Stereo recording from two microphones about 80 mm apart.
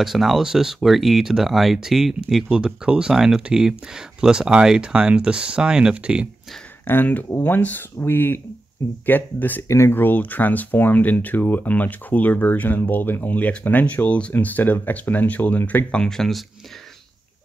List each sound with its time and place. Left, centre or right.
0.0 s speech: centre
6.9 s speech: left; by 16.4 s centre